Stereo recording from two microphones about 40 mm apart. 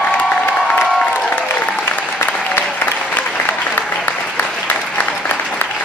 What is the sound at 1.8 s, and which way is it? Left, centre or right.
Applause, left.